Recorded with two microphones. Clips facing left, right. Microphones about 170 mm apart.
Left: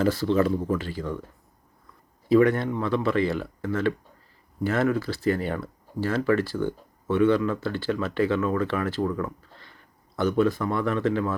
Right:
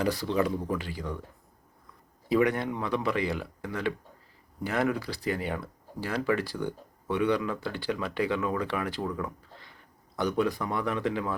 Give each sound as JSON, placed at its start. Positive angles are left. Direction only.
{"t": 0.0, "sound": "speech", "side_deg": -15}
{"t": 2.3, "sound": "speech", "side_deg": -15}